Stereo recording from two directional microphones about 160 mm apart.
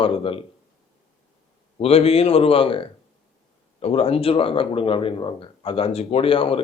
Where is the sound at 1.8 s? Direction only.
40° left (ahead or behind).